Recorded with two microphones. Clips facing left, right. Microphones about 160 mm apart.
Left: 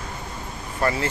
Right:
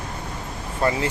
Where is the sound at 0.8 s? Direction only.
15° right (ahead or behind).